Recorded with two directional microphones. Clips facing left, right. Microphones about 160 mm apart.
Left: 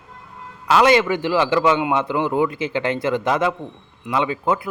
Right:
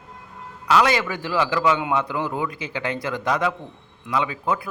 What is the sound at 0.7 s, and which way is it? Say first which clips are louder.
A man's voice: left 4 dB; 25° left (ahead or behind).